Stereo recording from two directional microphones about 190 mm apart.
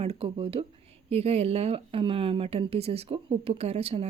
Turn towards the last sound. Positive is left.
turn(degrees=-30)  # may be behind; listen again after turning